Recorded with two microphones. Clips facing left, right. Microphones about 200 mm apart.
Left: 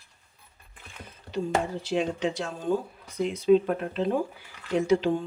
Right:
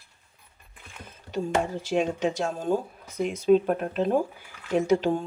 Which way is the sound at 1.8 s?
45° right (ahead or behind).